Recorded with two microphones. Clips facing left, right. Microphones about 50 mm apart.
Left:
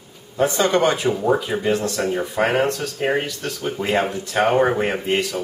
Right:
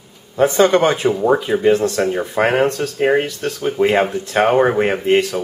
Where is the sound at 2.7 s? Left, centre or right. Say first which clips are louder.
Right 5 dB; right.